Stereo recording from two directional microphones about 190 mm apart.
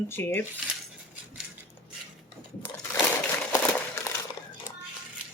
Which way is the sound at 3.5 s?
15° left (ahead or behind).